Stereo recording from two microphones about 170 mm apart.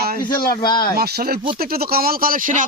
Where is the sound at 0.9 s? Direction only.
65° right (ahead or behind).